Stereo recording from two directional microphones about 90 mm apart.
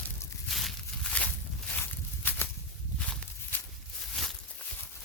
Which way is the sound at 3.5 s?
20° left (ahead or behind).